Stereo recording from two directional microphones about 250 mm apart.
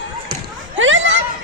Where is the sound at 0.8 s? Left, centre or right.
Right.